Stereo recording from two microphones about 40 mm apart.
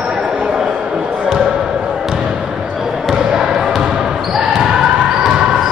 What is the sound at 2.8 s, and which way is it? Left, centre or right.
Basketball bounce, centre.